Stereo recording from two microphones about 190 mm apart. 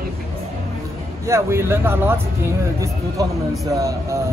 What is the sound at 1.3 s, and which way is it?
Speech, 15° right (ahead or behind).